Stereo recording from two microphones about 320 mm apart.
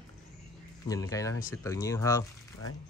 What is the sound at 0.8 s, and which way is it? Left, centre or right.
Speech, centre.